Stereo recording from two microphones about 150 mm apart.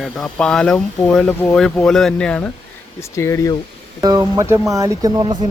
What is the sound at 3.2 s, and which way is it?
Speech, 20° left (ahead or behind).